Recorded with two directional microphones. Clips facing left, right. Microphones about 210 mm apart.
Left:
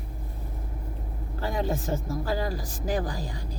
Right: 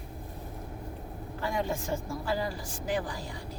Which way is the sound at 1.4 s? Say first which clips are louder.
Left 3 dB; 35° left (ahead or behind).